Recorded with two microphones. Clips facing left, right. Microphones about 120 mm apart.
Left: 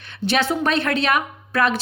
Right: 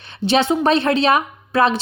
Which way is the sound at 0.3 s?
25° right (ahead or behind).